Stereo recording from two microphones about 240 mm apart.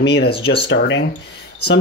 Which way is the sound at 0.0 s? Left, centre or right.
Left.